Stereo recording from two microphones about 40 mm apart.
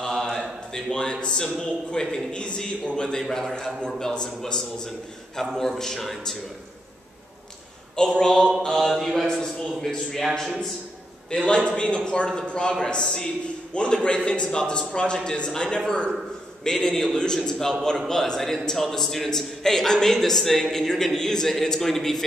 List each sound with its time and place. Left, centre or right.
0.0 s a sound: centre
1.2 s a man's voice: left
7.9 s a man's voice: centre
8.7 s mantra: centre
9.4 s a man's voice: centre
11.4 s a man's voice: left
16.6 s a man's voice: centre